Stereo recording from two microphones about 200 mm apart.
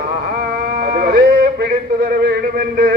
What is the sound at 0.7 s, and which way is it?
Music, 50° right (ahead or behind).